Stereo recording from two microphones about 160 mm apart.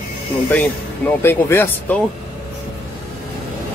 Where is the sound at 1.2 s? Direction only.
15° left (ahead or behind).